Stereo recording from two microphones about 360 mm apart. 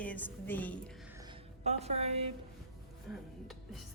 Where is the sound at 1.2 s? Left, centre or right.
Centre.